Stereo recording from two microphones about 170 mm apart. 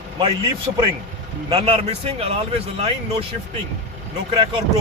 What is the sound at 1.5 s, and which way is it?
Speech, 35° right (ahead or behind).